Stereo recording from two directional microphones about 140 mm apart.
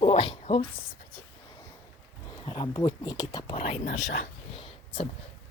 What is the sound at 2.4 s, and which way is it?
Speech, 35° left (ahead or behind).